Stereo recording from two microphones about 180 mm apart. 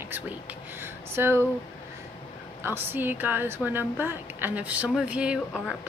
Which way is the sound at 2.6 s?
10° right (ahead or behind).